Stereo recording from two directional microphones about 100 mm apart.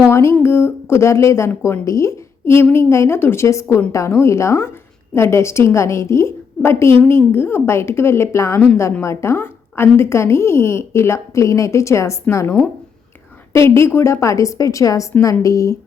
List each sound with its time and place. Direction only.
0.1 s a woman's voice: 30° left (ahead or behind)